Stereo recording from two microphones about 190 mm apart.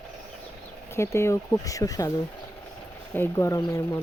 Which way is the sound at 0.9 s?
15° left (ahead or behind).